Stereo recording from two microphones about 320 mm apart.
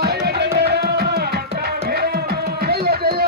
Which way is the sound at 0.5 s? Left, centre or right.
Right.